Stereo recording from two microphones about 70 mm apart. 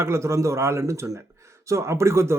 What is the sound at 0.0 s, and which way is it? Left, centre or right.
A man's voice, right.